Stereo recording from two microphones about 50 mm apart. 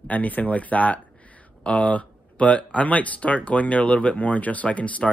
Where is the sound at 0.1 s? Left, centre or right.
Left.